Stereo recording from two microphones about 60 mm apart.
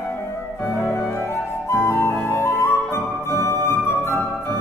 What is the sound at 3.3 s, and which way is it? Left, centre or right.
Music, left.